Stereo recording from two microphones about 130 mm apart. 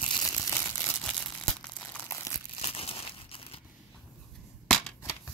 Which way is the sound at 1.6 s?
10° left (ahead or behind).